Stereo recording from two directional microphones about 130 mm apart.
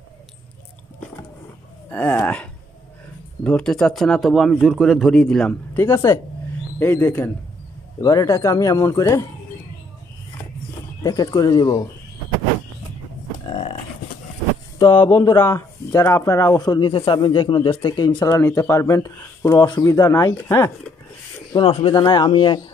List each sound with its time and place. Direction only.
1.9 s speech: 15° left (ahead or behind)
5.9 s speech: 25° left (ahead or behind)
8.0 s speech: 25° left (ahead or behind)
11.0 s speech: 30° left (ahead or behind)
13.5 s a sound: 45° left (ahead or behind)
14.8 s speech: 35° left (ahead or behind)
15.4 s speech: 20° left (ahead or behind)
21.5 s speech: 45° left (ahead or behind)